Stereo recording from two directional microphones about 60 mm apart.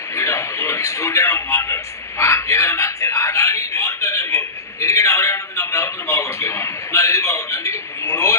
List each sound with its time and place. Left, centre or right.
0.1 s a man's voice: left